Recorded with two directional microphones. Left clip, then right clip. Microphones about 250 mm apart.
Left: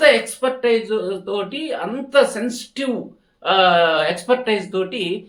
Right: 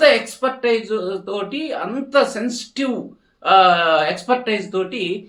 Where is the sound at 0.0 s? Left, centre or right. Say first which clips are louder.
Even; centre.